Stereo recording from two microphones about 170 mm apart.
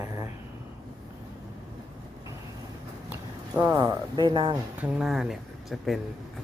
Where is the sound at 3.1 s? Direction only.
10° right (ahead or behind).